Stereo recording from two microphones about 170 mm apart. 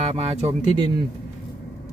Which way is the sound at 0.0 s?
40° right (ahead or behind).